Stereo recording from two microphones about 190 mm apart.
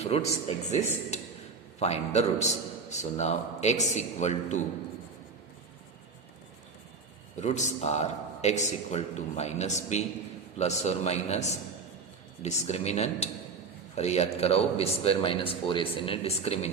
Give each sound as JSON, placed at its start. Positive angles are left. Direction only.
{"t": 0.0, "sound": "a man's voice", "side_deg": 35}
{"t": 7.3, "sound": "a man's voice", "side_deg": 35}